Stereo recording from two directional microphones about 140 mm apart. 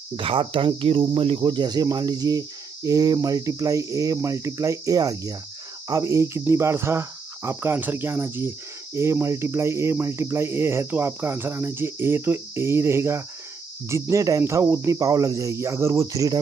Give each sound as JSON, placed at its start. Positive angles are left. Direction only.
{"t": 0.1, "sound": "speech", "side_deg": -40}